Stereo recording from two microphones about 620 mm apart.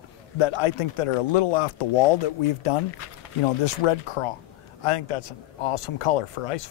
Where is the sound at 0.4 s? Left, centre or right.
Left.